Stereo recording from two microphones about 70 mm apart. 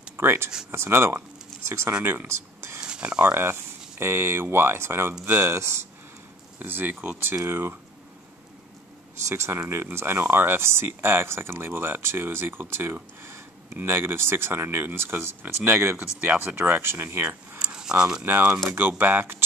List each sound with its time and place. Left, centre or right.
0.2 s speech: right
2.8 s a sound: centre
3.3 s speech: right
6.6 s speech: right
7.4 s speech: right
9.3 s speech: right
16.0 s speech: right
17.6 s keys jangling: centre
18.2 s speech: right